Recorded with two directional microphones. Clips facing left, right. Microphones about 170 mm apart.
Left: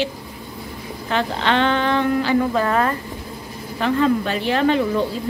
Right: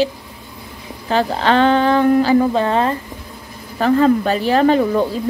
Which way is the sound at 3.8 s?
40° right (ahead or behind).